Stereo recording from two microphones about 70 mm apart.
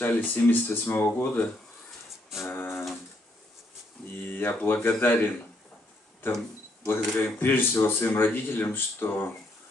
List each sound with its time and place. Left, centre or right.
0.0 s speech: left
2.4 s music: left
4.3 s a sound: left
4.8 s speech: left
6.9 s speech: left